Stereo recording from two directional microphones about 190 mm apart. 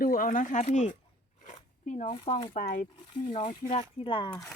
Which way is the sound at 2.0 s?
30° left (ahead or behind).